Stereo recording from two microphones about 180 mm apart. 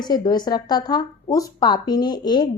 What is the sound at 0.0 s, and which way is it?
Speech, 20° left (ahead or behind).